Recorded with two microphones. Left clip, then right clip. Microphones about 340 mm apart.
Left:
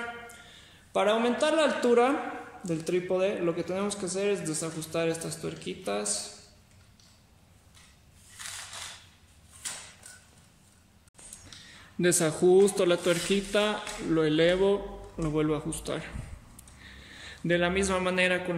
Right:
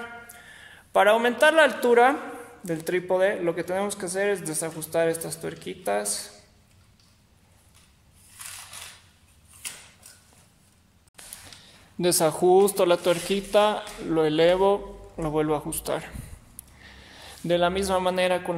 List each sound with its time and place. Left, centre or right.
0.9 s a man's voice: right
12.0 s speech: centre
16.8 s a sound: centre